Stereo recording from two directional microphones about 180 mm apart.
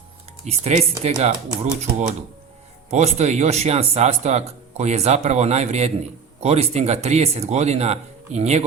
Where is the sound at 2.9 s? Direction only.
35° right (ahead or behind).